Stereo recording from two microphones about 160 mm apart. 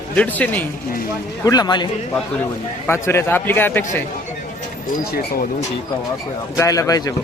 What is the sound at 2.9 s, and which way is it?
Speech, 15° left (ahead or behind).